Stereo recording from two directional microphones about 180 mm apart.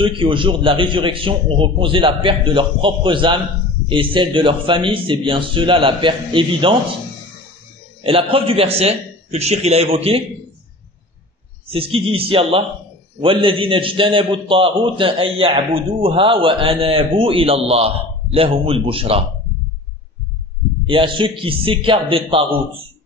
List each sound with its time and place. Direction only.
0.0 s a man's voice: 30° right (ahead or behind)
8.0 s a man's voice: 30° right (ahead or behind)
11.7 s a man's voice: 30° right (ahead or behind)
20.8 s a man's voice: 25° right (ahead or behind)